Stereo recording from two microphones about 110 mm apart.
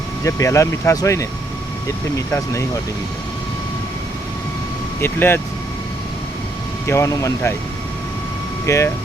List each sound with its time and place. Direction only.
0.3 s speech: 30° left (ahead or behind)
4.9 s speech: 20° left (ahead or behind)
6.8 s speech: 25° left (ahead or behind)
8.6 s speech: 25° left (ahead or behind)